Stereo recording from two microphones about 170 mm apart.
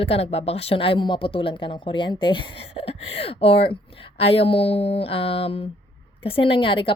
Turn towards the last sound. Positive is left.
turn(degrees=30)  # may be behind; listen again after turning